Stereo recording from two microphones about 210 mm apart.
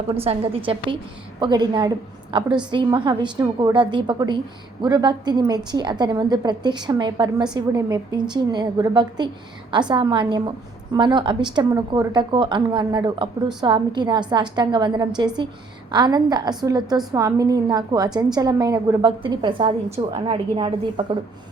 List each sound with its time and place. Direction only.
0.1 s a woman's voice: 25° right (ahead or behind)